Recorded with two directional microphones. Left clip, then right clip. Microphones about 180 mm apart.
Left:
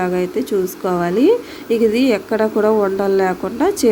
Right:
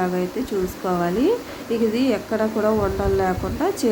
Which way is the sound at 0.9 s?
30° left (ahead or behind).